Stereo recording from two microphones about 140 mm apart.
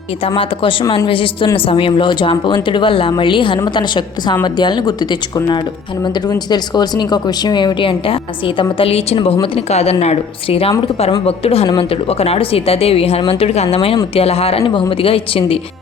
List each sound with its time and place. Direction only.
0.3 s speech: 40° left (ahead or behind)
6.2 s speech: 30° left (ahead or behind)